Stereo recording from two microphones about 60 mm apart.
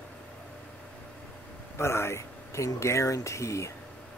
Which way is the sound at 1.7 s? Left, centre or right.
Left.